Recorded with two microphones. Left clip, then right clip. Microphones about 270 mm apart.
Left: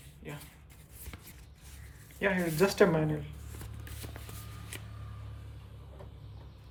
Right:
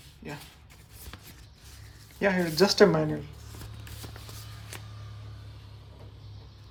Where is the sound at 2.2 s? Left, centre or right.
Centre.